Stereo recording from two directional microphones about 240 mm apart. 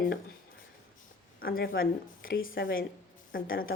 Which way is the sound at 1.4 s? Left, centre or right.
Left.